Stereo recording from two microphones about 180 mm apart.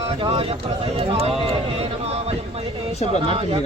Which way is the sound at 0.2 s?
30° right (ahead or behind).